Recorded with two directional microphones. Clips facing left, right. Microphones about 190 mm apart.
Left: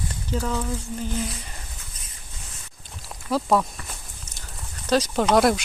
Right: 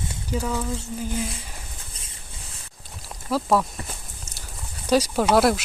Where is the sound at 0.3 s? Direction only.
10° right (ahead or behind).